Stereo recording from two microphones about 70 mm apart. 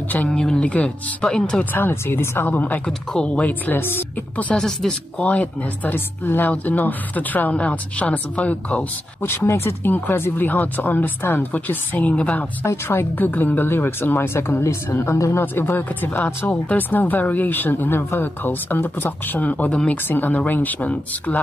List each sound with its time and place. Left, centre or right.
0.3 s speech: centre
1.6 s speech: left
2.9 s speech: centre
3.3 s speech: left
4.6 s speech: centre
5.2 s speech: left
9.2 s speech: left; by 12.4 s centre
12.6 s speech: left
15.4 s speech: left